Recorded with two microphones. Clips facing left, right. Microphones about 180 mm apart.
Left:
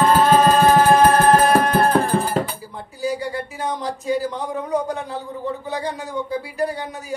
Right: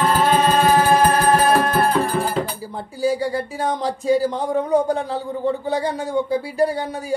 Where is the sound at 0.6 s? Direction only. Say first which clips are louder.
Left 2 dB; 45° left (ahead or behind).